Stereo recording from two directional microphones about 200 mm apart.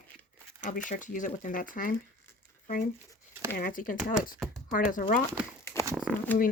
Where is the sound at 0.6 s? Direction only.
40° left (ahead or behind).